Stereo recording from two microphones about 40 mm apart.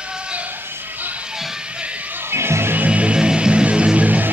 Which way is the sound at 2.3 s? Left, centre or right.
Right.